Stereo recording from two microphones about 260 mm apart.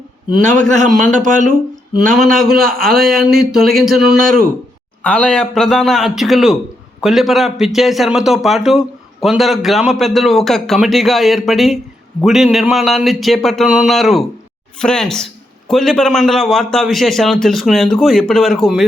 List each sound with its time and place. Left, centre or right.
0.9 s a man's voice: centre
1.1 s speech: right
2.0 s a man's voice: centre